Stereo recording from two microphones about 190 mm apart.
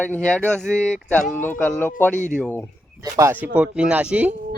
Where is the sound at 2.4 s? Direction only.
10° left (ahead or behind).